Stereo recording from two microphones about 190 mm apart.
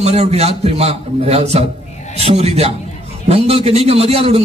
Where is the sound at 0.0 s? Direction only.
35° right (ahead or behind).